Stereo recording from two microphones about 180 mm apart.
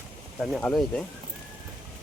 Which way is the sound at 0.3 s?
Centre (ahead or behind).